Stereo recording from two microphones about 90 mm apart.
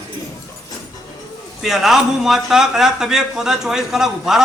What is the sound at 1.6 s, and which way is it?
A man's voice, 5° right (ahead or behind).